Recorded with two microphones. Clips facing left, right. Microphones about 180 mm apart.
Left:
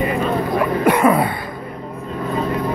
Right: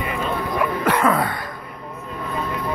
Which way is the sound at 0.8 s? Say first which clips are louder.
Left 5 dB; 15° left (ahead or behind).